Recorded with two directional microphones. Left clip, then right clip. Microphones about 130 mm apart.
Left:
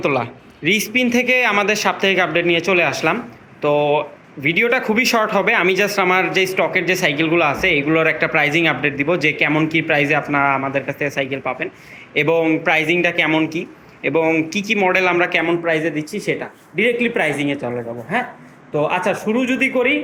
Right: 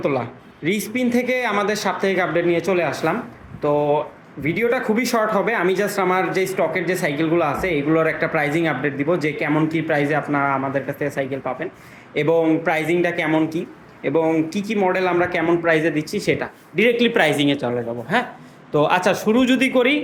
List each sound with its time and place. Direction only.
0.0 s a man's voice: 10° right (ahead or behind)